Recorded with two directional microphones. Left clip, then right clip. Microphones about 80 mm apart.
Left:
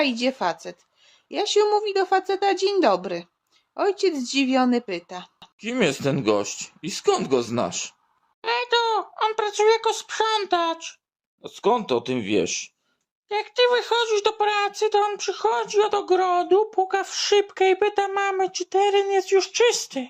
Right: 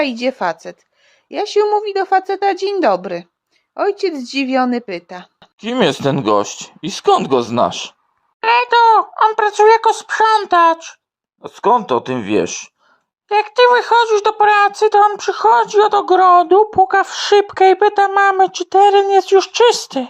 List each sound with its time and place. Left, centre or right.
0.0 s a woman's voice: right
5.8 s speech: right
8.4 s a child's voice: right